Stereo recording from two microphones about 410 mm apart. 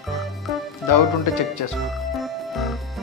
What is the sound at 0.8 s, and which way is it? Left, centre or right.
Speech, left.